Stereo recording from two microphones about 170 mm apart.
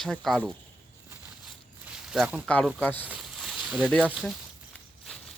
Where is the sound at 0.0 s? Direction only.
Centre (ahead or behind).